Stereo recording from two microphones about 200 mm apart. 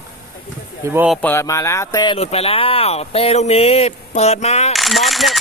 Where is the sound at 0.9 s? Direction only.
10° right (ahead or behind).